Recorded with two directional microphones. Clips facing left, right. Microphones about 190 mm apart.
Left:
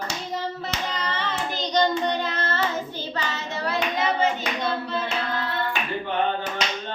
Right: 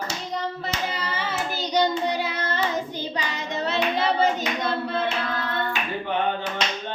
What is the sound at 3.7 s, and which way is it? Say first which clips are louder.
Hands: right 2 dB; 30° right (ahead or behind).